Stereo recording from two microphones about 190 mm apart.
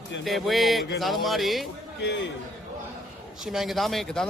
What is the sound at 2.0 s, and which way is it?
Speech, 65° left (ahead or behind).